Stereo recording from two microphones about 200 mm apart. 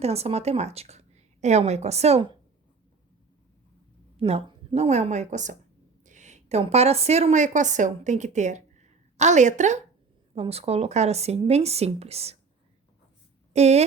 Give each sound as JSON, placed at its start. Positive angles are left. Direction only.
{"t": 0.0, "sound": "a woman's voice", "side_deg": -30}
{"t": 4.2, "sound": "a woman's voice", "side_deg": -25}
{"t": 13.5, "sound": "speech", "side_deg": -35}